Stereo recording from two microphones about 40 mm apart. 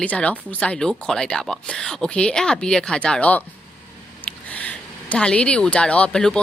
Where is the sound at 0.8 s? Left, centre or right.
Centre.